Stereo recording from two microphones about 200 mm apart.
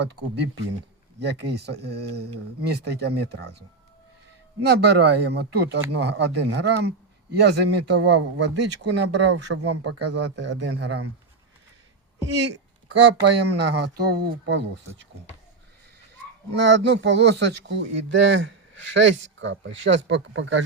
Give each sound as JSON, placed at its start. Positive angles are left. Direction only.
{"t": 0.0, "sound": "speech", "side_deg": -55}
{"t": 4.6, "sound": "speech", "side_deg": -55}
{"t": 12.9, "sound": "speech", "side_deg": -60}
{"t": 16.6, "sound": "speech", "side_deg": -65}